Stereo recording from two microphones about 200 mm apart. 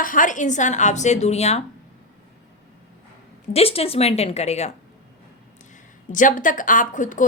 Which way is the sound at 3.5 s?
30° left (ahead or behind).